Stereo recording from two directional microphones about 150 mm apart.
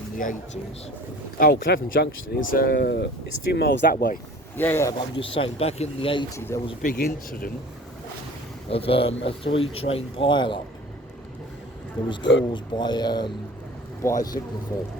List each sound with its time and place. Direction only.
0.2 s speech: 60° left (ahead or behind)
1.4 s speech: 75° left (ahead or behind)
4.5 s speech: 15° left (ahead or behind)
5.1 s speech: 40° left (ahead or behind)
6.3 s speech: 20° left (ahead or behind)
6.8 s speech: 70° left (ahead or behind)
8.7 s speech: 40° left (ahead or behind)
12.0 s speech: 30° left (ahead or behind)